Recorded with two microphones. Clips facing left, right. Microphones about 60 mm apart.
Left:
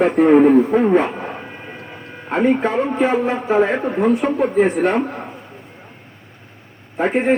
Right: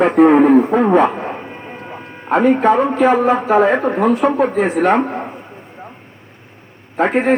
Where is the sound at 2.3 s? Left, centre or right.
Right.